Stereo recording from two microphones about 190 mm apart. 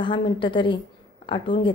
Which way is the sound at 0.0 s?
25° left (ahead or behind).